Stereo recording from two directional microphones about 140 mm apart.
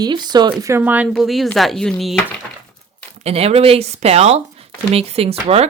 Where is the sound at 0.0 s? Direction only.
30° right (ahead or behind).